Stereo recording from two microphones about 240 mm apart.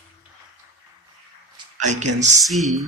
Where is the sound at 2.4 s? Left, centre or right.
Centre.